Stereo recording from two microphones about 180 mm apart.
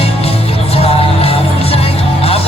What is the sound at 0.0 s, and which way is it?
Music, 35° left (ahead or behind).